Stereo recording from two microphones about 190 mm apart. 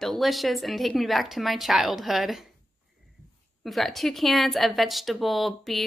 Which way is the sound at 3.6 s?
Centre (ahead or behind).